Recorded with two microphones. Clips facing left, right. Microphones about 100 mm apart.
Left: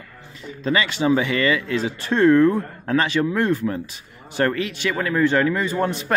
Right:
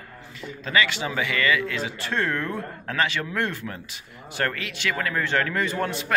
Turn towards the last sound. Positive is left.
turn(degrees=25)  # may be behind; listen again after turning